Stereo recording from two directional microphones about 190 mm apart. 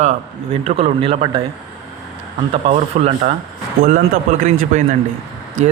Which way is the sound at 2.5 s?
30° right (ahead or behind).